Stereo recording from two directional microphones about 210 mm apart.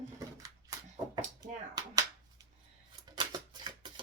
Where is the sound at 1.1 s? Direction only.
15° right (ahead or behind).